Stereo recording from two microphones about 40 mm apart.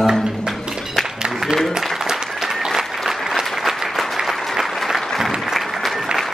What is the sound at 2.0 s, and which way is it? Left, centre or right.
Applause, centre.